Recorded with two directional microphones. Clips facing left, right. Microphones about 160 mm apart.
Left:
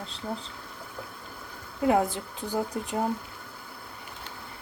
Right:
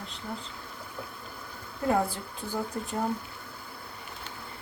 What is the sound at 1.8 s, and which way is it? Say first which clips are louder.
Speech: left 3 dB; 15° left (ahead or behind).